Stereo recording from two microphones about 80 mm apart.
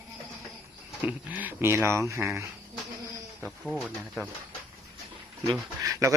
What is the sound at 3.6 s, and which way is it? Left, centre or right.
Speech, centre.